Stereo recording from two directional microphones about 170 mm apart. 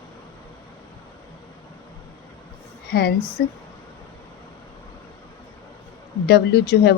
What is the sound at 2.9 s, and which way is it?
Speech, 70° left (ahead or behind).